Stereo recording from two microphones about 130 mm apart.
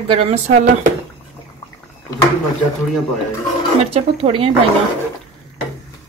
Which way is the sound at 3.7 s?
50° right (ahead or behind).